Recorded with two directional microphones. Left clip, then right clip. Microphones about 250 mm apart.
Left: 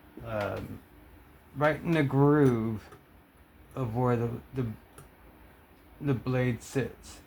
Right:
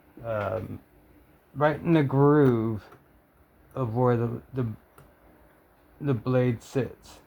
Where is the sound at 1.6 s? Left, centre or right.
Right.